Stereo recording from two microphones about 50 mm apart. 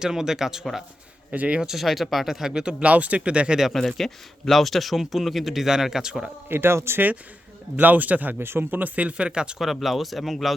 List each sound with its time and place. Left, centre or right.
0.0 s speech: centre
1.3 s speech: right
1.6 s speech: centre
2.5 s speech: centre
3.7 s speech: centre
6.5 s speech: right
7.8 s a man's voice: right
8.4 s speech: right
8.8 s speech: right
9.6 s speech: centre